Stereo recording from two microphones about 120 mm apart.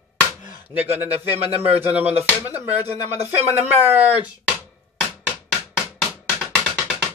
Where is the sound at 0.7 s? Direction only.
15° right (ahead or behind).